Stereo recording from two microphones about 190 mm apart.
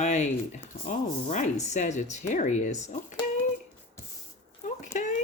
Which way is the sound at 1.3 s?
40° left (ahead or behind).